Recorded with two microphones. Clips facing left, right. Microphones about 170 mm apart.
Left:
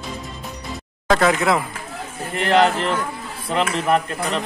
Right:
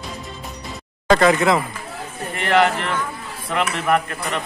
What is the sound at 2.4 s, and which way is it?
A man's voice, 35° left (ahead or behind).